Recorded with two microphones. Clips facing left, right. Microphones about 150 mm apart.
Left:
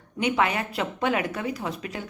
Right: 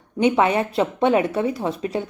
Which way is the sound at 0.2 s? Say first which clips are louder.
Right 7 dB; 25° right (ahead or behind).